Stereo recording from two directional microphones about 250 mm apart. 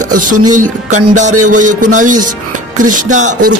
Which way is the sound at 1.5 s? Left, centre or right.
Right.